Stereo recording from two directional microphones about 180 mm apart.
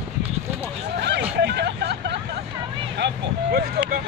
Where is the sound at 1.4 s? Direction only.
70° right (ahead or behind).